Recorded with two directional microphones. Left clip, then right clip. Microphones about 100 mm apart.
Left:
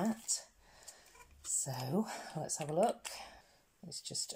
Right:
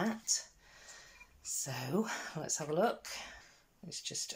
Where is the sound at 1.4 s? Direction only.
50° left (ahead or behind).